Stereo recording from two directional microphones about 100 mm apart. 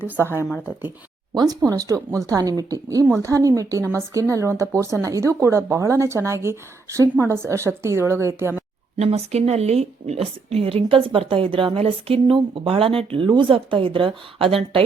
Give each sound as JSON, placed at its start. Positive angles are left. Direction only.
{"t": 1.3, "sound": "speech", "side_deg": -40}
{"t": 9.0, "sound": "a woman's voice", "side_deg": -90}